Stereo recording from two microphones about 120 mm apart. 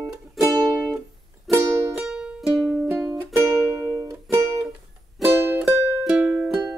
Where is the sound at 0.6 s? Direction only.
5° right (ahead or behind).